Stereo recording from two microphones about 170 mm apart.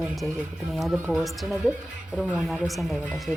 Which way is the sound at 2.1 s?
Centre (ahead or behind).